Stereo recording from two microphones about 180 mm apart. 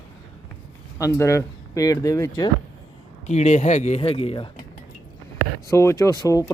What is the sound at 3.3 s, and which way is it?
Speech, 40° left (ahead or behind).